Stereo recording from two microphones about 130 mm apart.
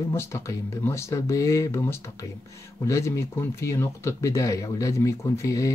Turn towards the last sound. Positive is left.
turn(degrees=25)  # may be behind; listen again after turning